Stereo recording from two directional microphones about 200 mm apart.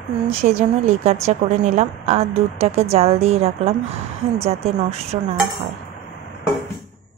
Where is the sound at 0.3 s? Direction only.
35° right (ahead or behind).